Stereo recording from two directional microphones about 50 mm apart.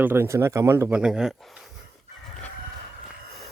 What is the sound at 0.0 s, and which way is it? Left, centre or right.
Speech, right.